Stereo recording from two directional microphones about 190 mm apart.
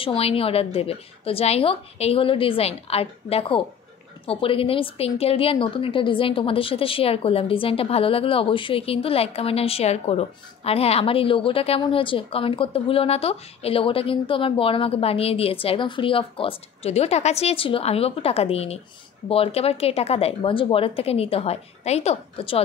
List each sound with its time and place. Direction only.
0.0 s a woman's voice: 30° left (ahead or behind)